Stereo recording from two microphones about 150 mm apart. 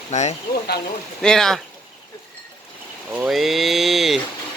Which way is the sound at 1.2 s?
5° left (ahead or behind).